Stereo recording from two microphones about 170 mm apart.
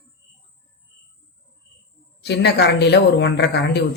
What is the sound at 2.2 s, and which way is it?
Speech, 80° left.